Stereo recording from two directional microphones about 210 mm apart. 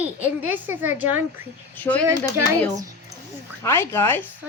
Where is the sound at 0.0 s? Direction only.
10° right (ahead or behind).